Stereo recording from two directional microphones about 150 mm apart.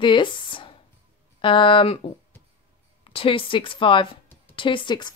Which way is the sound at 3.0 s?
35° left (ahead or behind).